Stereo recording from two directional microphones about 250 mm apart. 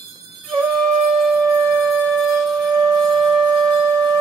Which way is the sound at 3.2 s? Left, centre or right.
Centre.